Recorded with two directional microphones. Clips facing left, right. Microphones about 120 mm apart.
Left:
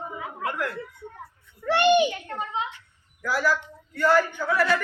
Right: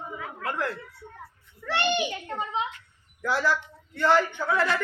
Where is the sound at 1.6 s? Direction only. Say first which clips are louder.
Left 7 dB; 15° left (ahead or behind).